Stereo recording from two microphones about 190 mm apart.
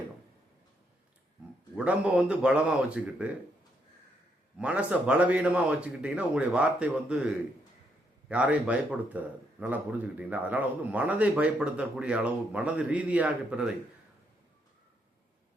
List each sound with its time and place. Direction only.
1.7 s speech: 5° right (ahead or behind)
4.5 s speech: 5° right (ahead or behind)
8.3 s speech: 5° right (ahead or behind)